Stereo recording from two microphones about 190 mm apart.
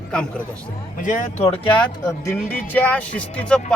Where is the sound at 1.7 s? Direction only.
25° left (ahead or behind).